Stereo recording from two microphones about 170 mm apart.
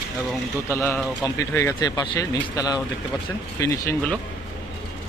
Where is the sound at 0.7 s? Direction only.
15° left (ahead or behind).